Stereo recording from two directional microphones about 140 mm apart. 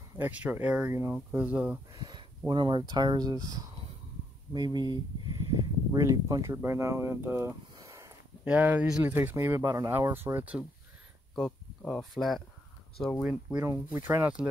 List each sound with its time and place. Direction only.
0.2 s speech: 10° right (ahead or behind)
1.9 s speech: 30° right (ahead or behind)
8.5 s speech: 10° right (ahead or behind)
11.4 s speech: 5° left (ahead or behind)
13.2 s speech: 10° right (ahead or behind)
13.7 s speech: 20° right (ahead or behind)